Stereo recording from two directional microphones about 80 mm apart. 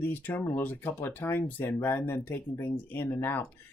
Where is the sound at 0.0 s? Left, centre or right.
Left.